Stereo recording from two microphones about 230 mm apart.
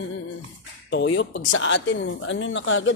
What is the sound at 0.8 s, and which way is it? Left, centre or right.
Speech, left.